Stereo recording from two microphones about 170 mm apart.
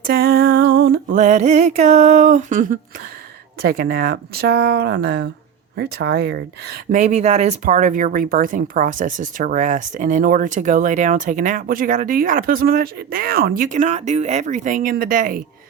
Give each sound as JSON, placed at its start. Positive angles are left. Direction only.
{"t": 0.1, "sound": "a sound", "side_deg": -65}
{"t": 1.1, "sound": "speech", "side_deg": -45}
{"t": 3.6, "sound": "speech", "side_deg": -60}
{"t": 6.9, "sound": "speech", "side_deg": -40}